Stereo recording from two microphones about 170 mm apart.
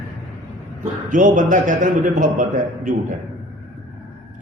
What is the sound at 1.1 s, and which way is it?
A man's voice, 50° right (ahead or behind).